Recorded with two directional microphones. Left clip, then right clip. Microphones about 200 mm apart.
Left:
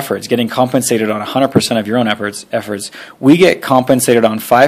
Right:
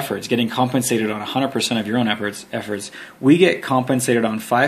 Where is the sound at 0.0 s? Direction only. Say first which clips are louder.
Left 6 dB; 40° left (ahead or behind).